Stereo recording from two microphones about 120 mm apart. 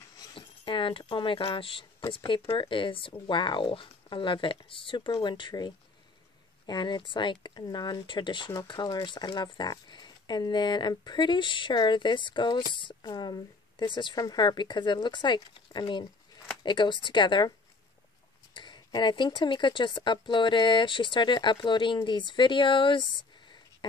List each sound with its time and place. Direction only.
0.2 s speech: 45° left (ahead or behind)
18.5 s speech: 40° left (ahead or behind)